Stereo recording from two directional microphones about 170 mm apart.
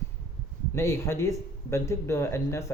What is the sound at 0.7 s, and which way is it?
Speech, 15° left (ahead or behind).